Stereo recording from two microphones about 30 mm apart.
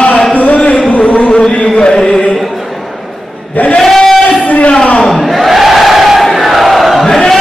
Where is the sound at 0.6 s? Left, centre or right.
Left.